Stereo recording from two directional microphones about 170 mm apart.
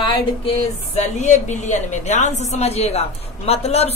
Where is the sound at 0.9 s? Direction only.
40° left (ahead or behind).